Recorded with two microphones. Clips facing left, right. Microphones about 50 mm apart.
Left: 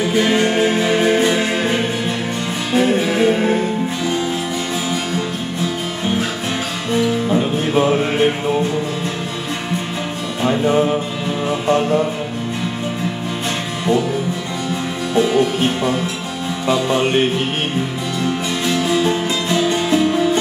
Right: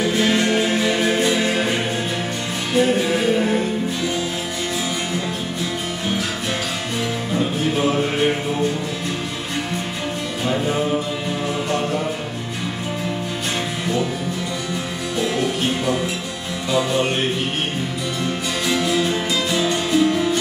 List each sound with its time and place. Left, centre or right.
0.0 s music: centre
2.8 s music: centre
7.2 s music: left
15.1 s music: left
18.8 s music: centre
19.7 s music: left